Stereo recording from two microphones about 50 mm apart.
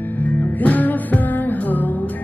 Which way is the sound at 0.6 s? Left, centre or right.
Left.